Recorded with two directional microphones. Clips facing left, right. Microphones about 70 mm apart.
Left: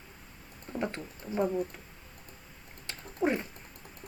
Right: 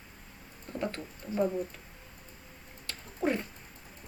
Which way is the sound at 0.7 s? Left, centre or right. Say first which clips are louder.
Left 1 dB; left.